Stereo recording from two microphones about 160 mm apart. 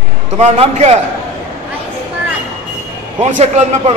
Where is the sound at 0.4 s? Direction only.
40° right (ahead or behind).